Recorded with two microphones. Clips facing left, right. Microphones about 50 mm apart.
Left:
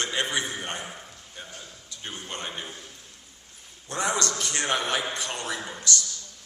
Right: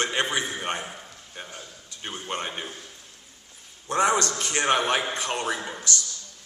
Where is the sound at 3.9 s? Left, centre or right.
Right.